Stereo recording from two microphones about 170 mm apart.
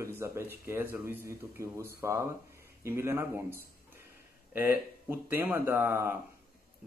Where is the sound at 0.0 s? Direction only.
15° right (ahead or behind).